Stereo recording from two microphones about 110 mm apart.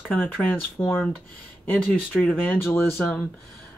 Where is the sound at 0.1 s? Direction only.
15° left (ahead or behind).